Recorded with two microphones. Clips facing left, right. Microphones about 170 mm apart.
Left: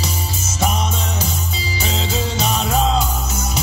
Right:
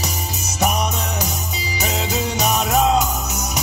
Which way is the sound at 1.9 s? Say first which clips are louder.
Even; 15° right (ahead or behind).